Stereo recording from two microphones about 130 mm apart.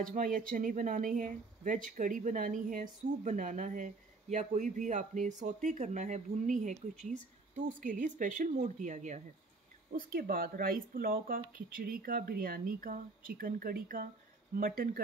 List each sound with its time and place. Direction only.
0.1 s speech: 85° right; by 9.2 s 70° right (ahead or behind)
9.9 s speech: 90° right